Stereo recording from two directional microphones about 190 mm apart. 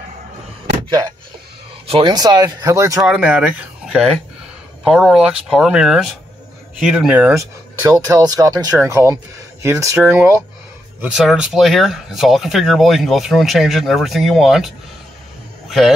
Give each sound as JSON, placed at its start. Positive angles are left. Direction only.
{"t": 0.8, "sound": "speech", "side_deg": -20}
{"t": 3.0, "sound": "speech", "side_deg": -5}